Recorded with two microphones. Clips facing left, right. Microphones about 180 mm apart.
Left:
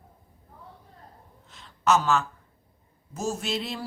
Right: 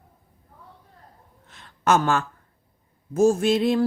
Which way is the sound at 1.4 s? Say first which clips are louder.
Right 2 dB; 55° right (ahead or behind).